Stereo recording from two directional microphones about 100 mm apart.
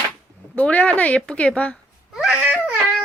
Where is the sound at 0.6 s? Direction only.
15° left (ahead or behind).